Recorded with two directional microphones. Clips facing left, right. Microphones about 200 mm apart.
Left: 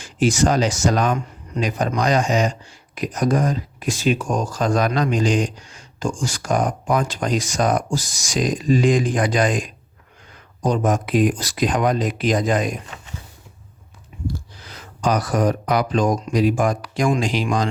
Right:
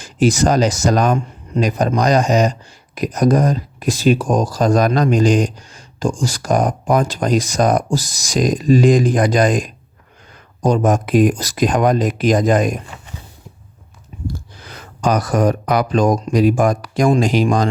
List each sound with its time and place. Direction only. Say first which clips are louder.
0.0 s speech: right 3 dB; 40° right (ahead or behind)
14.1 s a sound: right 1 dB; 40° right (ahead or behind)
14.6 s speech: right 3 dB; 55° right (ahead or behind)